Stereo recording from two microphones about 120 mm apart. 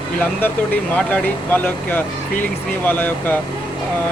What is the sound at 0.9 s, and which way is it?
Speech, 15° left (ahead or behind).